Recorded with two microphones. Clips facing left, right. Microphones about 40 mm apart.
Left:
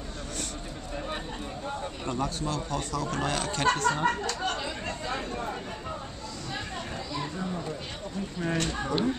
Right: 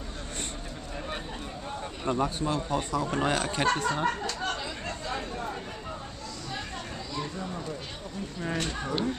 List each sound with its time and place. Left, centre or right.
2.0 s speech: centre
3.7 s chatter: centre
7.2 s a sound: centre
8.5 s speech: centre